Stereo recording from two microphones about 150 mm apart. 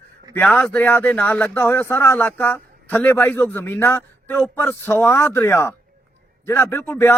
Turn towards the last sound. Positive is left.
turn(degrees=15)  # may be behind; listen again after turning